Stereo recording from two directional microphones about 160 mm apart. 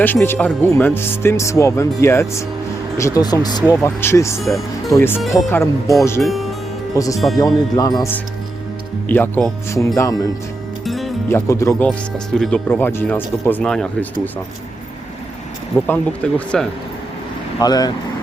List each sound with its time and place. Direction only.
0.0 s speech: 15° left (ahead or behind)
4.4 s speech: centre (ahead or behind)
4.9 s speech: 15° left (ahead or behind)
6.2 s speech: centre (ahead or behind)
6.9 s speech: 20° left (ahead or behind)
9.0 s speech: 10° left (ahead or behind)
10.8 s music: centre (ahead or behind)
11.3 s speech: 15° left (ahead or behind)
11.8 s speech: 5° left (ahead or behind)
15.9 s speech: 5° left (ahead or behind)
17.6 s speech: 25° left (ahead or behind)